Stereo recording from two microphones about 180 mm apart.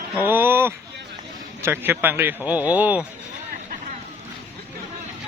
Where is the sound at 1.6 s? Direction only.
10° right (ahead or behind).